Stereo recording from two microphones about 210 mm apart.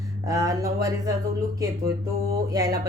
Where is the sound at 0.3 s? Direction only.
15° right (ahead or behind).